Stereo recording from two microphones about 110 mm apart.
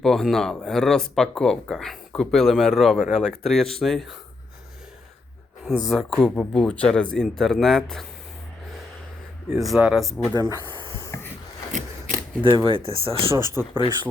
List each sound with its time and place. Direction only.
0.0 s speech: 5° left (ahead or behind)
5.6 s speech: centre (ahead or behind)
9.6 s speech: 5° right (ahead or behind)
10.3 s snake: 35° right (ahead or behind)
12.4 s speech: 50° right (ahead or behind)
13.4 s speech: 25° right (ahead or behind)